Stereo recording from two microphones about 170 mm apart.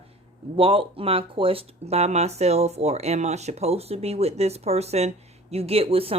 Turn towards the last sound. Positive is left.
turn(degrees=-35)  # may be behind; listen again after turning